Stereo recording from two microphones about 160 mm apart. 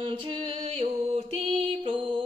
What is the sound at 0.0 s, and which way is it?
Music, 30° right (ahead or behind).